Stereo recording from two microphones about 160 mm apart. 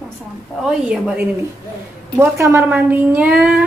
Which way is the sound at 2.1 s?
15° right (ahead or behind).